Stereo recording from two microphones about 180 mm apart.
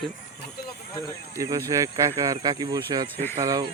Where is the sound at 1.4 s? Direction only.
20° right (ahead or behind).